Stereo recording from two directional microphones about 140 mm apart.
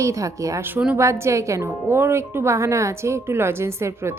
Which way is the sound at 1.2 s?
20° right (ahead or behind).